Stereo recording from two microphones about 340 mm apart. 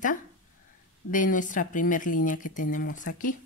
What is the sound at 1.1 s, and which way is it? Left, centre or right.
Speech, left.